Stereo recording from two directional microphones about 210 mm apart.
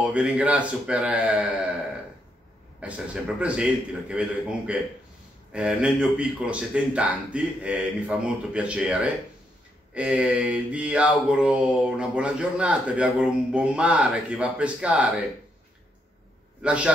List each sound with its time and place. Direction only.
0.0 s mantra: 5° right (ahead or behind)
3.3 s mantra: 5° right (ahead or behind)
16.6 s a man's voice: 5° right (ahead or behind)